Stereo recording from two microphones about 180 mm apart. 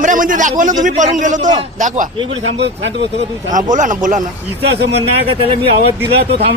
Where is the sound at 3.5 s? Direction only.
45° right (ahead or behind).